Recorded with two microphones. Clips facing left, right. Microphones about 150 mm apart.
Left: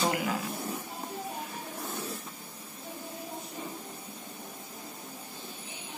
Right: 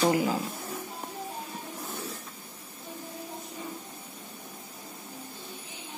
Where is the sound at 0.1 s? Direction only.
30° right (ahead or behind).